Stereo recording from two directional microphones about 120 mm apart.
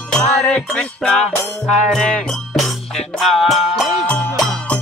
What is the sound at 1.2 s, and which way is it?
Music, 70° left (ahead or behind).